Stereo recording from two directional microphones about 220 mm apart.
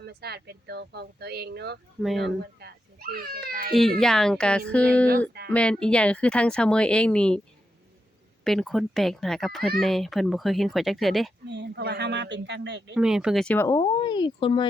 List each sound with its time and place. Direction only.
0.0 s speech: 45° right (ahead or behind)
3.7 s speech: centre (ahead or behind)
8.4 s speech: centre (ahead or behind)
11.4 s speech: 50° right (ahead or behind)
12.9 s speech: 5° right (ahead or behind); by 14.7 s 20° left (ahead or behind)